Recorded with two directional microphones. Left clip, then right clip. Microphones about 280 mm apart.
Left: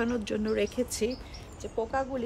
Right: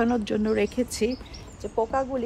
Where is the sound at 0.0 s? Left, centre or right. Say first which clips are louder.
Right 6 dB; centre.